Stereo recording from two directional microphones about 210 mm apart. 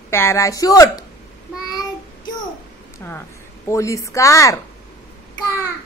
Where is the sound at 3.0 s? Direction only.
10° left (ahead or behind).